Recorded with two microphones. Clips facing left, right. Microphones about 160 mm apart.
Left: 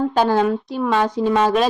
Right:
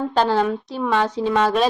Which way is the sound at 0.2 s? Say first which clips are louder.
Left 1 dB; 5° left (ahead or behind).